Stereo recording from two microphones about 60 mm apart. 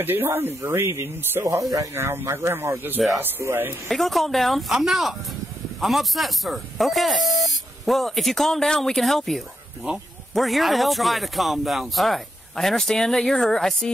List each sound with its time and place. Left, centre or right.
0.0 s speech: right
2.0 s speech: right
3.9 s speech: centre